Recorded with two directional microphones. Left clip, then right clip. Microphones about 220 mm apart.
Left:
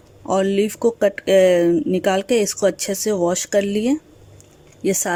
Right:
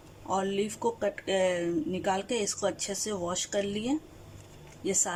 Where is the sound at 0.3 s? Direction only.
50° left (ahead or behind).